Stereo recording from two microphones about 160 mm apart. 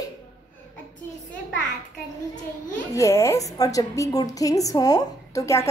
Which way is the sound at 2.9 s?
20° left (ahead or behind).